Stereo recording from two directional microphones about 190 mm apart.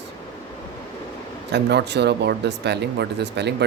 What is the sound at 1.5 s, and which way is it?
Speech, 60° right (ahead or behind).